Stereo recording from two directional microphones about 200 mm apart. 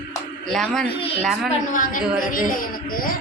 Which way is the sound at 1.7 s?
40° left (ahead or behind).